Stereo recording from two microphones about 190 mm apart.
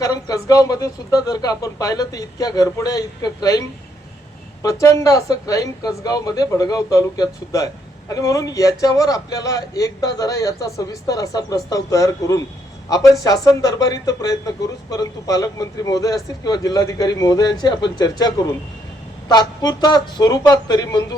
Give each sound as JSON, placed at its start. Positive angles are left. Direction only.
{"t": 0.0, "sound": "speech", "side_deg": 20}
{"t": 4.6, "sound": "speech", "side_deg": 15}